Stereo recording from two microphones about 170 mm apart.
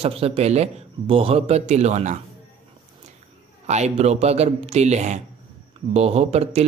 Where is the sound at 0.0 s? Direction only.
35° right (ahead or behind).